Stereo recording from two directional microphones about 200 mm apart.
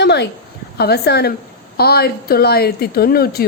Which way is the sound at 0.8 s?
50° left (ahead or behind).